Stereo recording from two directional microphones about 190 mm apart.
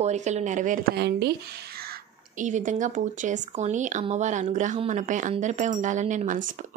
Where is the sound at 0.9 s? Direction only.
60° right (ahead or behind).